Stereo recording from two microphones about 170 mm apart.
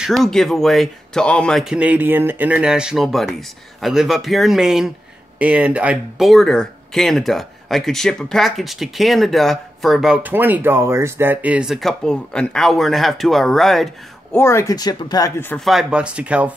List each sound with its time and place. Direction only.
0.0 s speech: centre (ahead or behind)
14.3 s speech: 15° left (ahead or behind)
15.6 s speech: centre (ahead or behind)